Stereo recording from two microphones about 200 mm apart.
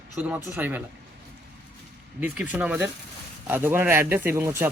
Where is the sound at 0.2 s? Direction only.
10° right (ahead or behind).